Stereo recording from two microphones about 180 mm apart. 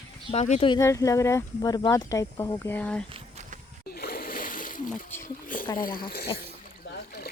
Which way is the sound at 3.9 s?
55° left (ahead or behind).